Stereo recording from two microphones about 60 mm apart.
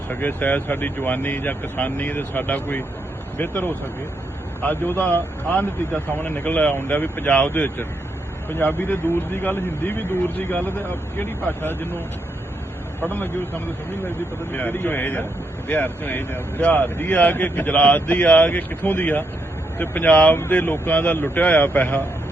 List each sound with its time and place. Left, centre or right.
0.1 s a man's voice: left
13.1 s speech: left
14.5 s a man's voice: left
20.1 s a man's voice: centre
20.5 s a man's voice: left